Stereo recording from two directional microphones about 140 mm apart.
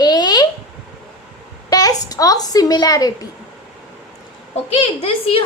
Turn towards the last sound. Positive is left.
turn(degrees=45)  # may be behind; listen again after turning